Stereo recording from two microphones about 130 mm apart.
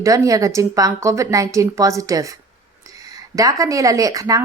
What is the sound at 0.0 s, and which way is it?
A woman's voice, 25° right (ahead or behind).